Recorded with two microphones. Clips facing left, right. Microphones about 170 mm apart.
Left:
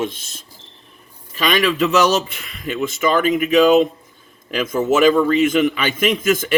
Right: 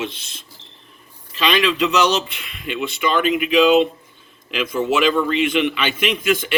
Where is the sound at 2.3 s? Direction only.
40° left (ahead or behind).